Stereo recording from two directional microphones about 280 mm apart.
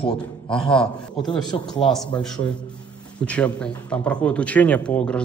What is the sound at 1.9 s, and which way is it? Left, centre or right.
A man's voice, centre.